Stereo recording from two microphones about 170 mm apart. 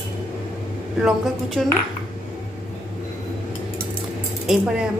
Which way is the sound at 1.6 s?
Centre (ahead or behind).